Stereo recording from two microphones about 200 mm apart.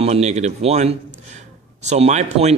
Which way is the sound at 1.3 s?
35° right (ahead or behind).